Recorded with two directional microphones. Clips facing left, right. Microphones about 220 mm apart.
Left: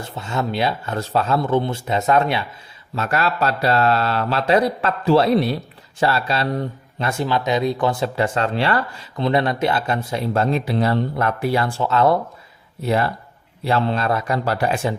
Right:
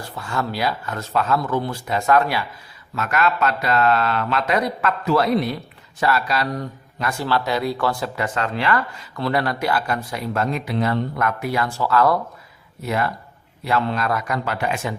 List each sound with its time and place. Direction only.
0.0 s speech: 20° left (ahead or behind)